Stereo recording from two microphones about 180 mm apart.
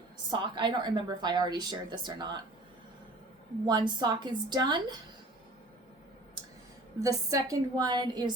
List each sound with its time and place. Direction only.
0.3 s a woman's voice: 25° right (ahead or behind)
3.7 s a woman's voice: 25° right (ahead or behind)
7.0 s a woman's voice: 20° right (ahead or behind)